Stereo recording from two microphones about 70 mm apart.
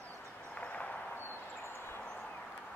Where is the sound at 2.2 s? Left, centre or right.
Left.